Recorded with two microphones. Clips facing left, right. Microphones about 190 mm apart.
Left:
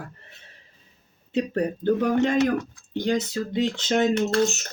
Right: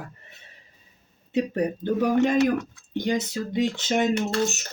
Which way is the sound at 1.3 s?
15° right (ahead or behind).